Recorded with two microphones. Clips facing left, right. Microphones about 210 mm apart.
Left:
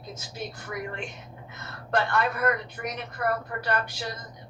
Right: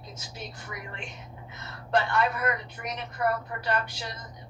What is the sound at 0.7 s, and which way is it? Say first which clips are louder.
A woman's voice: left 6 dB; 50° left (ahead or behind).